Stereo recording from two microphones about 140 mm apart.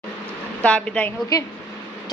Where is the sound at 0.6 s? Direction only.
5° left (ahead or behind).